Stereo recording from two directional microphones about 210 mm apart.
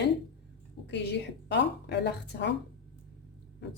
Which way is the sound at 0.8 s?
55° left (ahead or behind).